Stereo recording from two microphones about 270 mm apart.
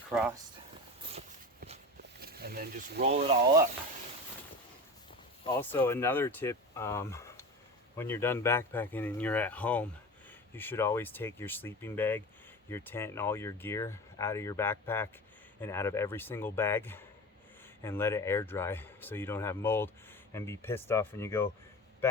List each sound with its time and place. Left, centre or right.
0.1 s speech: centre
2.0 s a sound: right
5.5 s speech: centre